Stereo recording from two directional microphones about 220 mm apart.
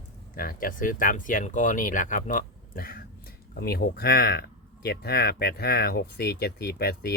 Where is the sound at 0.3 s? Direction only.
40° left (ahead or behind).